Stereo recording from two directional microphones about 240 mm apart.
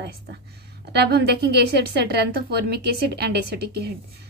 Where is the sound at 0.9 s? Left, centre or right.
Right.